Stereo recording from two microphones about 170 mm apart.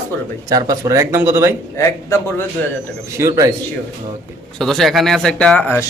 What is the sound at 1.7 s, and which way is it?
Speech, 15° left (ahead or behind).